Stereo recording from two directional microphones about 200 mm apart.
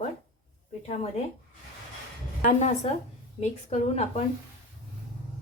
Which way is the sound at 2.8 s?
30° left (ahead or behind).